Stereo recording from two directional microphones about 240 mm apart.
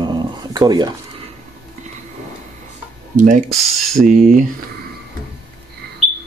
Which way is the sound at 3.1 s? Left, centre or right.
Right.